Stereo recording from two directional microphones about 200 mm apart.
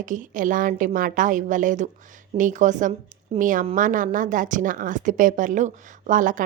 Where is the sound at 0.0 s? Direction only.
40° right (ahead or behind).